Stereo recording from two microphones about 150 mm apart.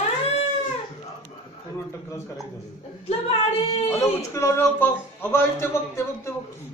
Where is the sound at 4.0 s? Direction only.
20° left (ahead or behind).